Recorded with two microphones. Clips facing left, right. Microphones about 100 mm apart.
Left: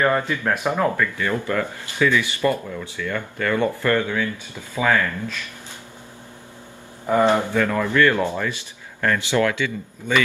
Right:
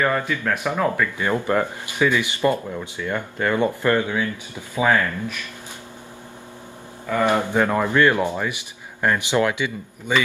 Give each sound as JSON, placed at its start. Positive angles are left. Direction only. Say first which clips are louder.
{"t": 0.3, "sound": "speech", "louder": "left 1 dB", "side_deg": 15}
{"t": 1.1, "sound": "speech", "louder": "right 2 dB", "side_deg": -20}
{"t": 7.2, "sound": "speech", "louder": "even", "side_deg": -20}